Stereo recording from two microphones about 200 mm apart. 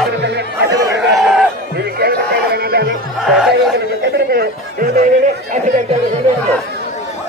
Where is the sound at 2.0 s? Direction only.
50° right (ahead or behind).